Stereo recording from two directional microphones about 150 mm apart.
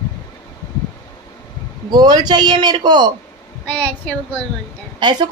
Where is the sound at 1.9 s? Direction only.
25° right (ahead or behind).